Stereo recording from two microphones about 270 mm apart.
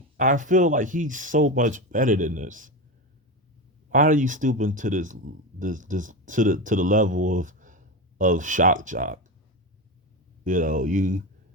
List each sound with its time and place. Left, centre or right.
0.2 s speech: right
3.8 s speech: right
10.4 s speech: right